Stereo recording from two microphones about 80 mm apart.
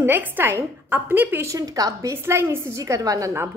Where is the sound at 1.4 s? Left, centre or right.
Right.